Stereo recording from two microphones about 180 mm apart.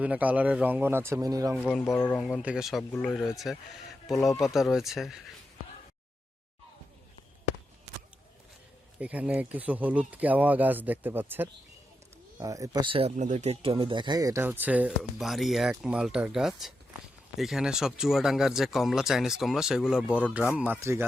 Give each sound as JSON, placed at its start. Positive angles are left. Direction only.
{"t": 0.0, "sound": "speech", "side_deg": -10}
{"t": 1.5, "sound": "speech", "side_deg": 0}
{"t": 1.8, "sound": "speech", "side_deg": 10}
{"t": 2.2, "sound": "speech", "side_deg": -5}
{"t": 9.0, "sound": "speech", "side_deg": -10}